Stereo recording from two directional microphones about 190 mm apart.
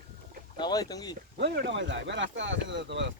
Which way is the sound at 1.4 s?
65° right (ahead or behind).